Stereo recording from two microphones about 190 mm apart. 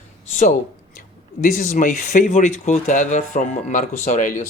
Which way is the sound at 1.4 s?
40° left (ahead or behind).